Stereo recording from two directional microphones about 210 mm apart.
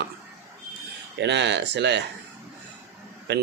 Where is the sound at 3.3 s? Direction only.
55° right (ahead or behind).